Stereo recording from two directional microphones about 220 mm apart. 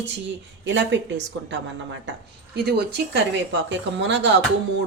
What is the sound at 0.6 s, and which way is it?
Speech, 55° right (ahead or behind).